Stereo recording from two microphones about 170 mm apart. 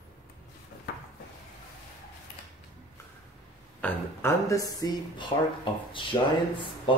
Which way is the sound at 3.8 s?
10° left (ahead or behind).